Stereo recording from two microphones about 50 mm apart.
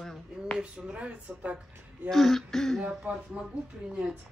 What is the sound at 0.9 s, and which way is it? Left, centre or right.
Speech, right.